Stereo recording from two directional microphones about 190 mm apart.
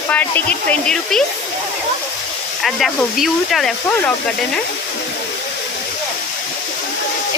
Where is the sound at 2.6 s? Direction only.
Centre (ahead or behind).